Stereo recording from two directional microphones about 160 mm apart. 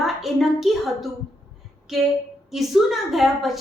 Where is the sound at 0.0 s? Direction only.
Centre (ahead or behind).